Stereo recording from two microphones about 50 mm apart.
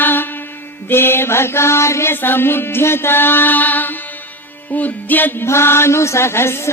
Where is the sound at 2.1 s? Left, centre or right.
Left.